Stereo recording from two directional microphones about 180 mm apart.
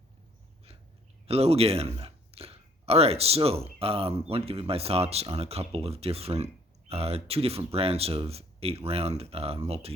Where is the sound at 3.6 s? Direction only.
30° right (ahead or behind).